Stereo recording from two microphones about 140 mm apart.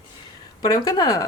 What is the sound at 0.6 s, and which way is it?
Speech, 25° left (ahead or behind).